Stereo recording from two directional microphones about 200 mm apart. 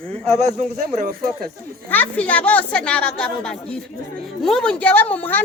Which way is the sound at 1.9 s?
10° left (ahead or behind).